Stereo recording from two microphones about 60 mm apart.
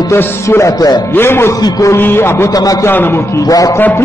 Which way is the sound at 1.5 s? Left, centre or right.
Left.